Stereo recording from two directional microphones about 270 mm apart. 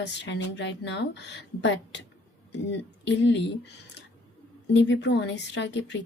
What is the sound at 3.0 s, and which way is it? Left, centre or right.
A woman's voice, left.